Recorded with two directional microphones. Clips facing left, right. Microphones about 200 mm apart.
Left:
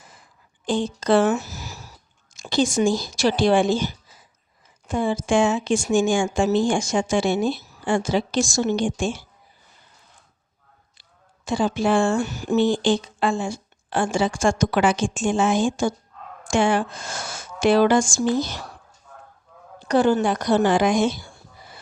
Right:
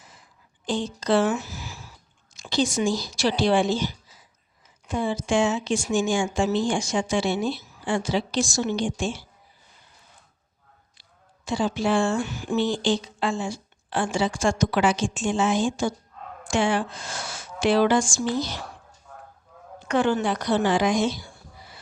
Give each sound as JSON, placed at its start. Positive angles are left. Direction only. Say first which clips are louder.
{"t": 0.6, "sound": "speech", "louder": "left 4 dB", "side_deg": 50}
{"t": 11.4, "sound": "speech", "louder": "left 3 dB", "side_deg": 50}
{"t": 19.8, "sound": "speech", "louder": "left 4 dB", "side_deg": 40}